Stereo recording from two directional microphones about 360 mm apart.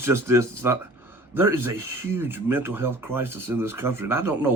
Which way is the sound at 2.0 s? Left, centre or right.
Centre.